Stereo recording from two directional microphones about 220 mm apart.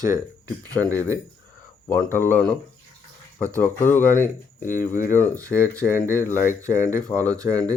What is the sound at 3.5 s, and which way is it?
Speech, 10° left (ahead or behind).